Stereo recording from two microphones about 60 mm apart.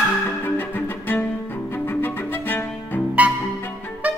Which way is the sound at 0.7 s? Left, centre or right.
Left.